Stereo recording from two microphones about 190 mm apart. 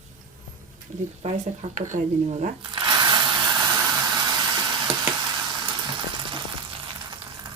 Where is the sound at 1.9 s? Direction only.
40° right (ahead or behind).